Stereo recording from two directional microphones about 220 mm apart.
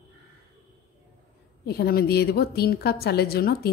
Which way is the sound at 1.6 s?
45° left (ahead or behind).